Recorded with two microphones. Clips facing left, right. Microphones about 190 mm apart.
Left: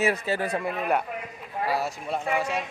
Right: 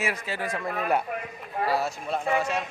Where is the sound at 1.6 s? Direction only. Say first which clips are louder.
Right 1 dB; 15° left (ahead or behind).